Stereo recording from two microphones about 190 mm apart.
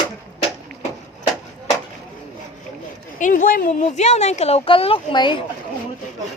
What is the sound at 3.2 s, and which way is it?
Speech, 45° left (ahead or behind).